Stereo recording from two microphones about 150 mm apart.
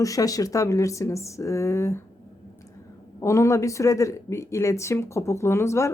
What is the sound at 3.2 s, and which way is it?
Speech, 20° left (ahead or behind).